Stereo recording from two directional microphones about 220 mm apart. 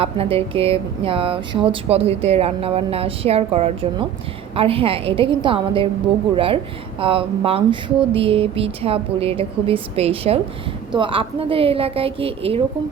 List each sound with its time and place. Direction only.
0.0 s speech: 25° right (ahead or behind)